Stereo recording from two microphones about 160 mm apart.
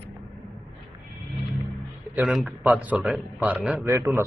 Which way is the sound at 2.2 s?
5° right (ahead or behind).